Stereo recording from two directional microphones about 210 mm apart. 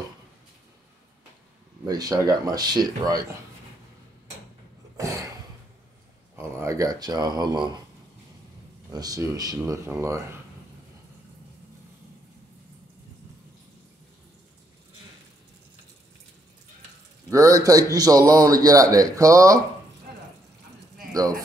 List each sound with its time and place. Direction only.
1.9 s speech: 15° right (ahead or behind)
4.9 s a sound: 15° right (ahead or behind)
6.3 s speech: 15° right (ahead or behind)
8.9 s speech: 15° right (ahead or behind)
17.3 s speech: 15° right (ahead or behind)
21.1 s speech: 15° right (ahead or behind)